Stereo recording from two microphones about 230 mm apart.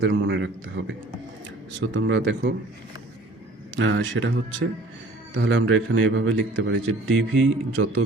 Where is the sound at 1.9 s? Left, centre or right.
Right.